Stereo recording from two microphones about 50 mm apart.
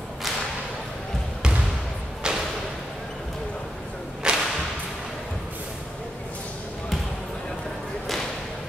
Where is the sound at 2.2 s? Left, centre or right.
Centre.